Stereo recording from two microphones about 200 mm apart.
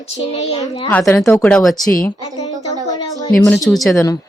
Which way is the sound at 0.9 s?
10° left (ahead or behind).